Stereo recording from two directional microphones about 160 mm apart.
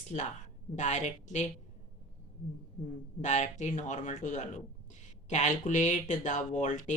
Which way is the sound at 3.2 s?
50° left (ahead or behind).